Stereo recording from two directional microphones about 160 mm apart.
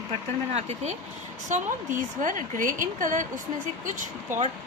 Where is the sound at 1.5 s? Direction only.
55° right (ahead or behind).